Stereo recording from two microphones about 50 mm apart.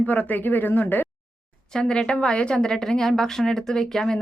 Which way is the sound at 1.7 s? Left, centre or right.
Centre.